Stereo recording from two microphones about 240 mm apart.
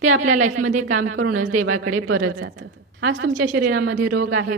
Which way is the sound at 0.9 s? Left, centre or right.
Right.